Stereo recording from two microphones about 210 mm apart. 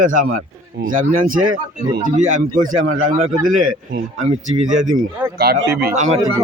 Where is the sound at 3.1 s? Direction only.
40° right (ahead or behind).